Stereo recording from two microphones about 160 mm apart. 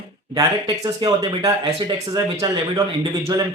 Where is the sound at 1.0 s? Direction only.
25° right (ahead or behind).